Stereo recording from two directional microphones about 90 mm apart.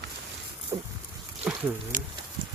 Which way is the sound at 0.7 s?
35° right (ahead or behind).